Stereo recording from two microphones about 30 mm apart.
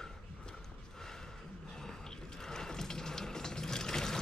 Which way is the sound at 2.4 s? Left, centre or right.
Centre.